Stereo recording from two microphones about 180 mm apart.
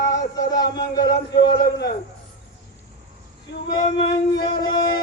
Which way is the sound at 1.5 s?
65° left (ahead or behind).